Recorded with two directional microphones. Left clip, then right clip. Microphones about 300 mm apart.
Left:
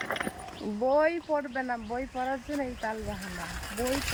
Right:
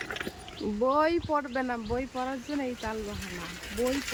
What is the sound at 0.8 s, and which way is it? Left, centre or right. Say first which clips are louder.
Speech: left 1 dB; centre.